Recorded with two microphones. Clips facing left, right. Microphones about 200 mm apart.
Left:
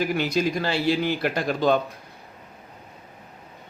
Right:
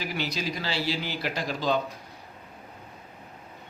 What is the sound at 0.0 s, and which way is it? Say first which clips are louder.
A man's voice: left 8 dB; 50° left (ahead or behind).